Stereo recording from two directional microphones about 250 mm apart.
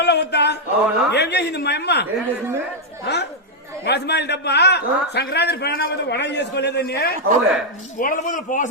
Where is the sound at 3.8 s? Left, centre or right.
Left.